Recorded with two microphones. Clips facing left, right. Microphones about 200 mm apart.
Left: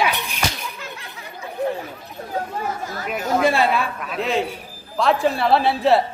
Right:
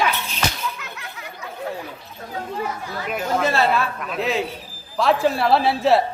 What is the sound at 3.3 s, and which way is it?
Speech, 15° left (ahead or behind).